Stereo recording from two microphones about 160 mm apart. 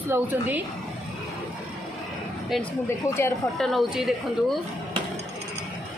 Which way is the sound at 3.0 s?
15° left (ahead or behind).